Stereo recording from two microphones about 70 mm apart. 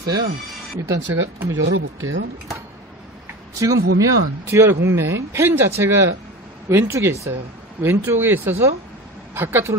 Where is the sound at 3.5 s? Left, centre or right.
Right.